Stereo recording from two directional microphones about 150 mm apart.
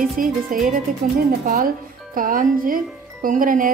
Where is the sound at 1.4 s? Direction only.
65° right (ahead or behind).